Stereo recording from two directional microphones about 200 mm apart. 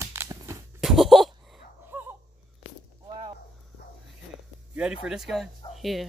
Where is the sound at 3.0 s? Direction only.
30° right (ahead or behind).